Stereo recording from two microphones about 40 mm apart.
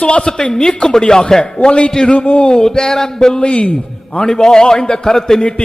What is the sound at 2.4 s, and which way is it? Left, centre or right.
Speech, centre.